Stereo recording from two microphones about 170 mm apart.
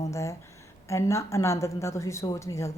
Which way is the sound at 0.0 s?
15° left (ahead or behind).